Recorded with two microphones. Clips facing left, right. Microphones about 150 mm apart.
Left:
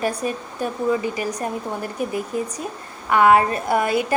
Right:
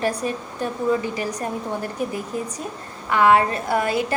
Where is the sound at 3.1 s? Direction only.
20° left (ahead or behind).